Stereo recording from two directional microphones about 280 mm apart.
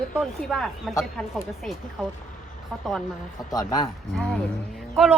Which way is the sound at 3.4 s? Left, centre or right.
Centre.